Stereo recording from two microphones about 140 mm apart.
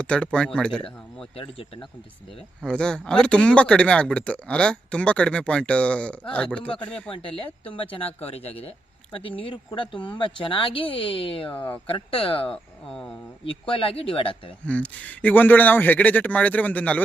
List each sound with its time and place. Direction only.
0.0 s speech: 5° left (ahead or behind)
1.4 s speech: 40° left (ahead or behind)
2.6 s speech: 5° left (ahead or behind)
7.1 s speech: 40° left (ahead or behind)
11.5 s speech: 15° left (ahead or behind)
11.9 s speech: 40° left (ahead or behind)
12.5 s speech: 5° left (ahead or behind)
13.4 s speech: 40° left (ahead or behind)
14.6 s speech: 10° left (ahead or behind)